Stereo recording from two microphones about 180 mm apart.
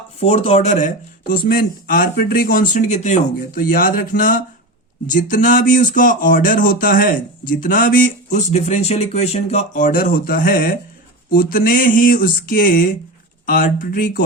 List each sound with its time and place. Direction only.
0.2 s speech: 35° left (ahead or behind); by 14.3 s 50° left (ahead or behind)